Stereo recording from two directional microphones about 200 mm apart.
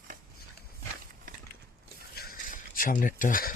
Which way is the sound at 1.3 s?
45° right (ahead or behind).